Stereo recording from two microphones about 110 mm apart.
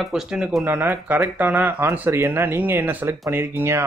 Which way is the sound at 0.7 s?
20° right (ahead or behind).